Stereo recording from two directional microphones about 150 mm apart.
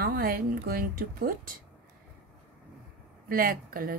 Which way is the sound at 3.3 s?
75° right (ahead or behind).